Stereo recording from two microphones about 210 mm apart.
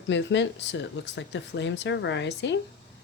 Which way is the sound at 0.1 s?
60° left (ahead or behind).